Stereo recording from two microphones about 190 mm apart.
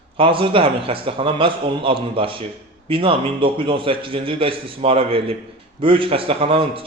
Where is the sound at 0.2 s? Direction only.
25° right (ahead or behind).